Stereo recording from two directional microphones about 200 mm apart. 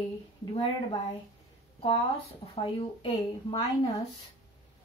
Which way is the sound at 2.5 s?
25° left (ahead or behind).